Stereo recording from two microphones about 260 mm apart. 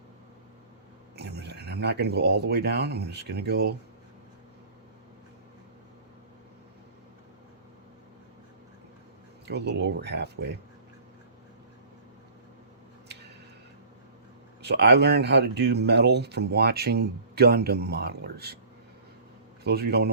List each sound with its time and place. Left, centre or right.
1.1 s speech: right
9.5 s speech: right
14.6 s speech: right
19.6 s speech: right